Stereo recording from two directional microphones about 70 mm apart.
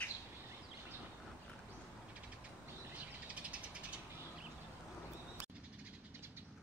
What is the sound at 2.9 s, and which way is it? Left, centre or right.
Cat, centre.